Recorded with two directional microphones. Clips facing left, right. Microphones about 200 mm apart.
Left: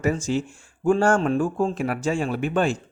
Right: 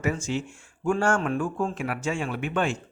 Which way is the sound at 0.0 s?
35° left (ahead or behind).